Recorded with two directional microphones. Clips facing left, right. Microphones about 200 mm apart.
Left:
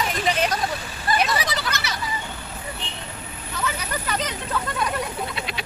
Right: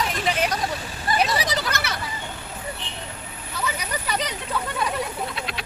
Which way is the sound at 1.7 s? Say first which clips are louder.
Right 1 dB; 55° right (ahead or behind).